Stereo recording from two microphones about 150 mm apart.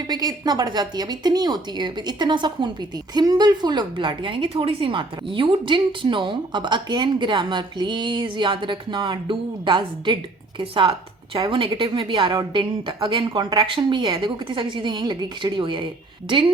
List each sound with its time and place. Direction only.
0.1 s a woman's voice: 25° right (ahead or behind)